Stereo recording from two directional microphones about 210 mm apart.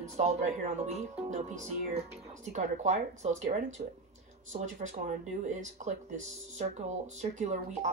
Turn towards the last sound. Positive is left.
turn(degrees=-35)  # may be behind; listen again after turning